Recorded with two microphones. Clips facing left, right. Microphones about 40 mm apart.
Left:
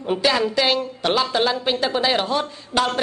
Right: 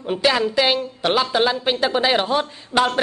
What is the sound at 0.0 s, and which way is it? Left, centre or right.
A woman's voice, centre.